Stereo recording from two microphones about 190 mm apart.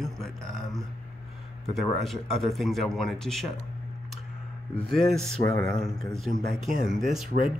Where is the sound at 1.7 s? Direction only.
Centre (ahead or behind).